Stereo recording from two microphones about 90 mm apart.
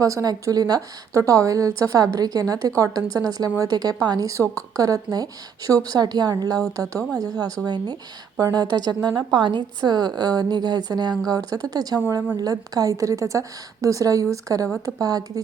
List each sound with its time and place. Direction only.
0.0 s a woman's voice: 40° right (ahead or behind)